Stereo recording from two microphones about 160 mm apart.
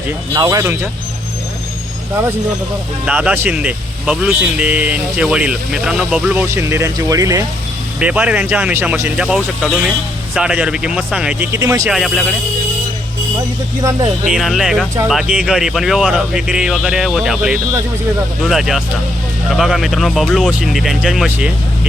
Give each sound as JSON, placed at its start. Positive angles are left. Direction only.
{"t": 0.3, "sound": "speech", "side_deg": -25}
{"t": 3.1, "sound": "speech", "side_deg": -10}
{"t": 7.9, "sound": "speech", "side_deg": -5}
{"t": 11.5, "sound": "speech", "side_deg": -20}
{"t": 11.9, "sound": "speech", "side_deg": 0}
{"t": 14.3, "sound": "speech", "side_deg": 0}